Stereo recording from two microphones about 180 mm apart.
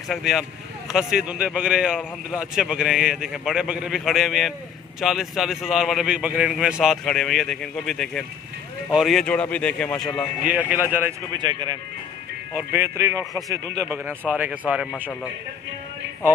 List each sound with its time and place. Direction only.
0.1 s a man's voice: centre (ahead or behind)
10.4 s speech: 10° right (ahead or behind)
11.3 s a man's voice: 20° right (ahead or behind); by 15.0 s 5° right (ahead or behind)